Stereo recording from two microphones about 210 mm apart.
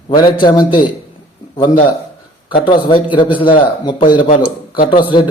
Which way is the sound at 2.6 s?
25° left (ahead or behind).